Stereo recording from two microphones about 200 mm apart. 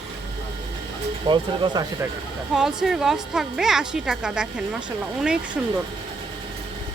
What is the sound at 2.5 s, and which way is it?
Speech, centre (ahead or behind).